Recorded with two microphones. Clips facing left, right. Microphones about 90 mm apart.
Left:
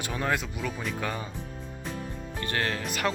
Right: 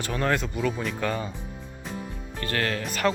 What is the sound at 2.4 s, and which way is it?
Speech, 15° left (ahead or behind).